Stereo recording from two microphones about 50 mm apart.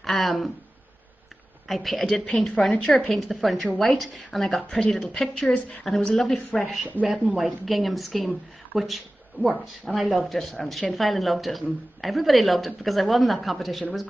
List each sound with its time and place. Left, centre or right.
0.0 s speech: centre
1.7 s a woman's voice: centre
2.6 s a woman's voice: left
3.1 s a woman's voice: centre
4.6 s a woman's voice: centre
5.9 s speech: centre
7.1 s a woman's voice: centre